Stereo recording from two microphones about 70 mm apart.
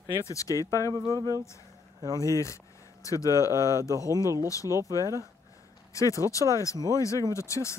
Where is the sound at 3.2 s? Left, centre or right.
Right.